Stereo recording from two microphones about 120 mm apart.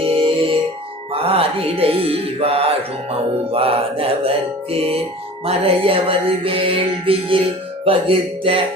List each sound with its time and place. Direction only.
0.0 s music: 50° right (ahead or behind)